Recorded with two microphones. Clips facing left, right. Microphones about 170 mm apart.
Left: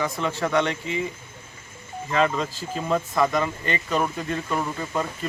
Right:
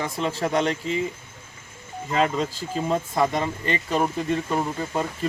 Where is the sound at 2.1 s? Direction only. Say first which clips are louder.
Even; 30° right (ahead or behind).